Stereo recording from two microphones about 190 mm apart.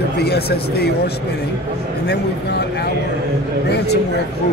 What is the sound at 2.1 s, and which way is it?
Speech, 60° left (ahead or behind).